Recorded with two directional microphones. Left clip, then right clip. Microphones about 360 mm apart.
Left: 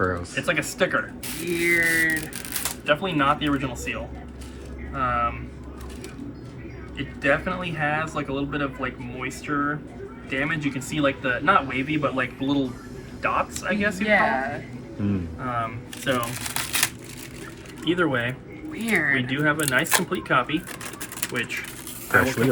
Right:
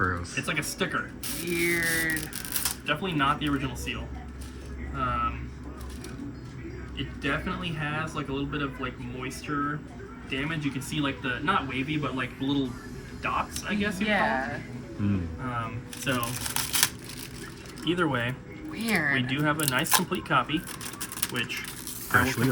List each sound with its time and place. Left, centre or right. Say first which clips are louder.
0.0 s speech: left 4 dB; centre
1.6 s a sound: left 7 dB; centre
2.5 s speech: left 7 dB; centre
6.9 s speech: left 8 dB; centre
18.9 s speech: left 4 dB; right
19.3 s speech: left 5 dB; centre